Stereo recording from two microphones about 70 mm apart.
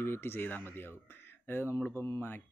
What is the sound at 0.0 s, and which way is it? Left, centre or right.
Speech, left.